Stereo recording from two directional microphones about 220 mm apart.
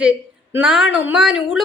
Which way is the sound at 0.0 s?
5° right (ahead or behind).